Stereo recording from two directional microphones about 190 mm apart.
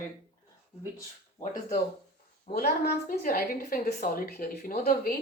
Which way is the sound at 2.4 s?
55° left (ahead or behind).